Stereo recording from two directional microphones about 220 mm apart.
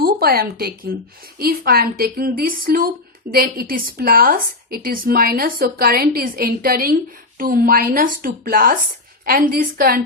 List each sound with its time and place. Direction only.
0.0 s a woman's voice: 45° right (ahead or behind)